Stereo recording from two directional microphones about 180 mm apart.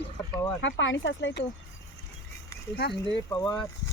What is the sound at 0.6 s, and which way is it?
Speech, 90° left.